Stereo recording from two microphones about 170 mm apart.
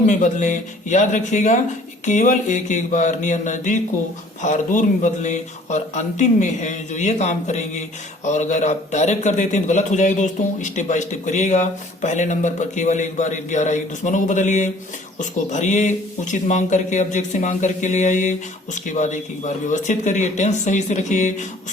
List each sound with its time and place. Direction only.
0.0 s speech: 45° left (ahead or behind)